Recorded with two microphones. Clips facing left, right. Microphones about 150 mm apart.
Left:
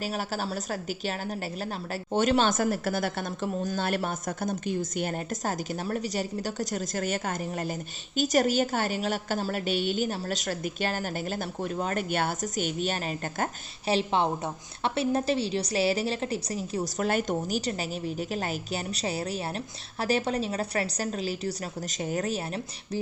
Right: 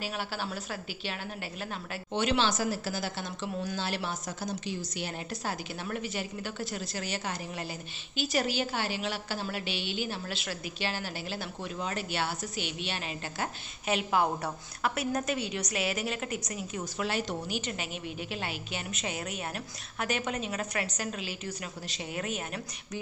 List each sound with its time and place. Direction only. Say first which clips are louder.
0.0 s a woman's voice: left 4 dB; 40° left (ahead or behind)
13.8 s a woman's voice: left 3 dB; 30° left (ahead or behind)